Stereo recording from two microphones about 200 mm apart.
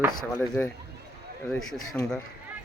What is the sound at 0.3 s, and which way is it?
Speech, 5° left (ahead or behind).